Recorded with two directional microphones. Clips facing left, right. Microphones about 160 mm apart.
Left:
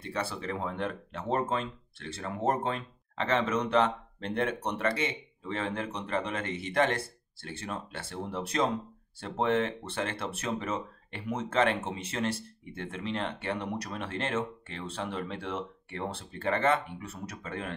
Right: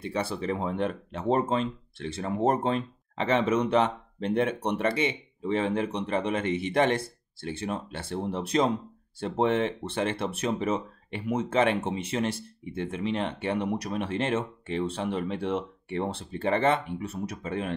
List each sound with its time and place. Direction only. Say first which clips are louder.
0.0 s speech: right 5 dB; 15° right (ahead or behind)